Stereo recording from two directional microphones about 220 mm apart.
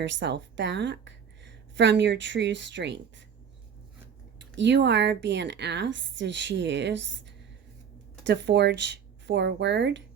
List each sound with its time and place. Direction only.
0.0 s a woman's voice: 55° right (ahead or behind)
4.4 s speech: 55° right (ahead or behind)